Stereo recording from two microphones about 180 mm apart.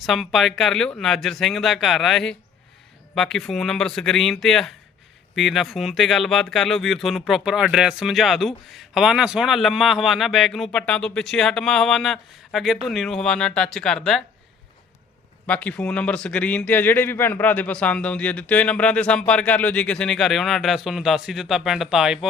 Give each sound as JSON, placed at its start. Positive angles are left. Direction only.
{"t": 0.0, "sound": "speech", "side_deg": 0}
{"t": 15.4, "sound": "a man's voice", "side_deg": 10}